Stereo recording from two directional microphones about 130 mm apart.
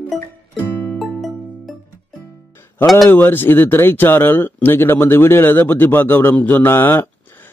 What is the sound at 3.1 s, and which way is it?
Speech, 15° left (ahead or behind).